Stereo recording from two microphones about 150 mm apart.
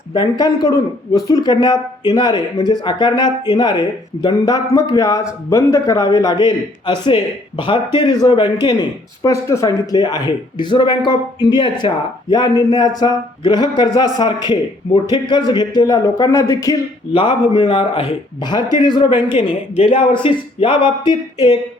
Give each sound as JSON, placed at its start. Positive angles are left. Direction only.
{"t": 0.1, "sound": "a man's voice", "side_deg": 30}